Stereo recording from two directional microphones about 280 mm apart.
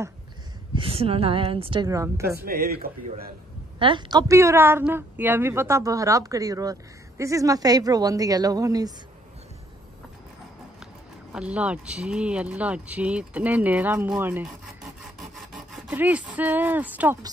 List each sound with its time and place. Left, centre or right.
0.7 s a woman's voice: centre
2.4 s a man's voice: right
3.8 s a woman's voice: centre
11.3 s speech: centre
15.7 s speech: centre